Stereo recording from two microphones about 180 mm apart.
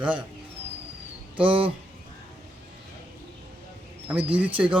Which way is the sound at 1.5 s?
30° right (ahead or behind).